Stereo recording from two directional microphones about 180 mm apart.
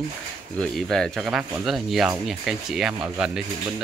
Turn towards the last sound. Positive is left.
turn(degrees=-5)  # may be behind; listen again after turning